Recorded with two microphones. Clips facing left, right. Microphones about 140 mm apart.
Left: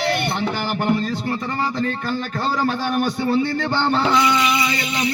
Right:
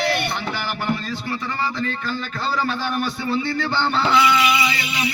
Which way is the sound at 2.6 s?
45° left (ahead or behind).